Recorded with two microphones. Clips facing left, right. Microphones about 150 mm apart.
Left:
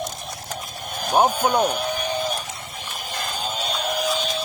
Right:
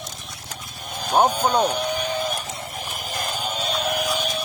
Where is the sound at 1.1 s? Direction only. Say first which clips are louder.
Even; 10° left (ahead or behind).